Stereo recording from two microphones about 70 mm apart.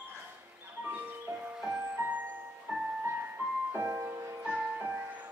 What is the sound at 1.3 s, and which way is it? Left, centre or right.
Music, right.